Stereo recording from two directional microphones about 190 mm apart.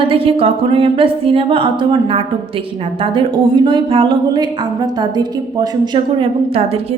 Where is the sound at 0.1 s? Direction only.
30° right (ahead or behind).